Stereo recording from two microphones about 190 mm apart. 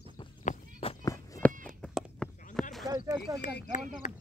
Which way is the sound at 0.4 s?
35° left (ahead or behind).